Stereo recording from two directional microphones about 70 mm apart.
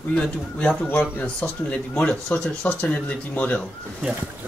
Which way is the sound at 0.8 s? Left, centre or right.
Left.